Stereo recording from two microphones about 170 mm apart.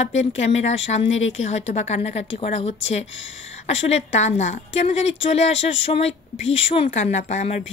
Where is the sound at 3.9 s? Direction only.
45° left (ahead or behind).